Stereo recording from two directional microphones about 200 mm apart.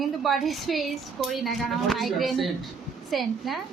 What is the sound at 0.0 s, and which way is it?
A woman's voice, centre (ahead or behind).